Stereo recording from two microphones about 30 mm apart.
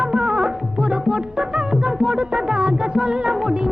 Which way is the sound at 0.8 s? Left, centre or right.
Right.